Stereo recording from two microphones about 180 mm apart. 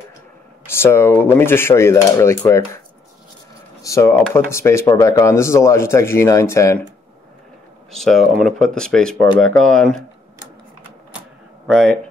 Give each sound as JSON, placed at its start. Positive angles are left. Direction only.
{"t": 0.7, "sound": "speech", "side_deg": 15}
{"t": 3.8, "sound": "speech", "side_deg": 15}
{"t": 7.9, "sound": "speech", "side_deg": 0}
{"t": 11.6, "sound": "speech", "side_deg": 0}